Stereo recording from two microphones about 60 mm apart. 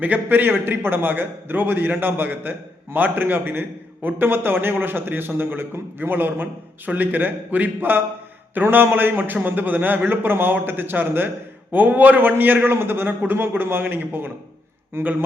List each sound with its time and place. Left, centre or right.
0.0 s a man's voice: right